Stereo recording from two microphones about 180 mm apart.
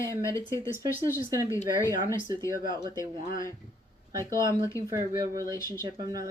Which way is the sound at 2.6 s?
25° right (ahead or behind).